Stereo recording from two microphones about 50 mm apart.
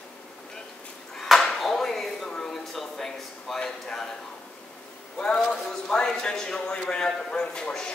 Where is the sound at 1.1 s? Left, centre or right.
Centre.